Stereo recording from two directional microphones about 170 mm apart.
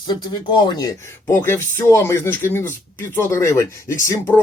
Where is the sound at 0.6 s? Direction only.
20° left (ahead or behind).